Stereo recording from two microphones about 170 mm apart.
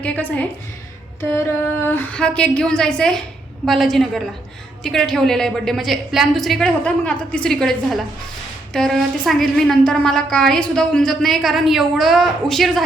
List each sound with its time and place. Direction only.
0.0 s a woman's voice: 10° left (ahead or behind)
1.9 s a woman's voice: 10° left (ahead or behind)